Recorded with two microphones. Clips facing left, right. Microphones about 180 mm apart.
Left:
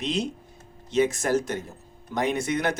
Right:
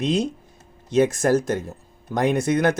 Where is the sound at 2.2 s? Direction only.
50° right (ahead or behind).